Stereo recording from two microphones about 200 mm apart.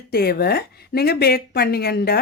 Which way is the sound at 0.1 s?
50° left (ahead or behind).